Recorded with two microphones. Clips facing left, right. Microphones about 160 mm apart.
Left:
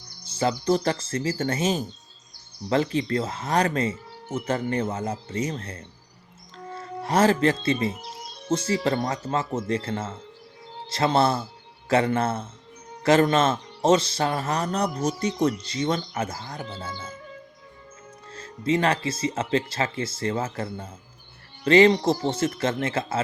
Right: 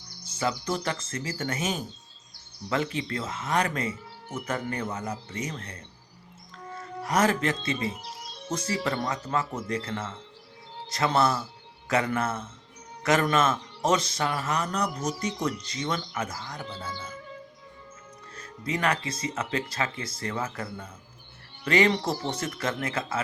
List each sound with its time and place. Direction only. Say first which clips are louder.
0.3 s speech: left 6 dB; 30° left (ahead or behind)
18.3 s speech: left 8 dB; 25° left (ahead or behind)